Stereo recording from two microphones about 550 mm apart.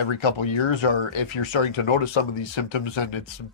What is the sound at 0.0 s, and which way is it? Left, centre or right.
Speech, left.